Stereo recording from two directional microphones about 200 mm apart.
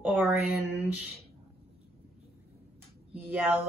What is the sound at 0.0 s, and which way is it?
Speech, 5° right (ahead or behind).